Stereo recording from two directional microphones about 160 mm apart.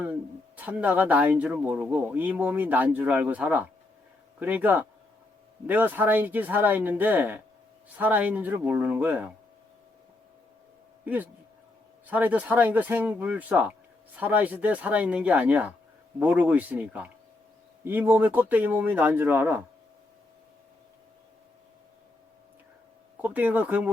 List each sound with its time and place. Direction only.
0.0 s speech: 10° right (ahead or behind)
11.0 s speech: 10° right (ahead or behind)
23.2 s speech: 10° right (ahead or behind)